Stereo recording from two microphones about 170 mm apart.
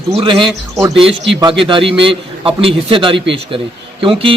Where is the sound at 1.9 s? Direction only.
30° right (ahead or behind).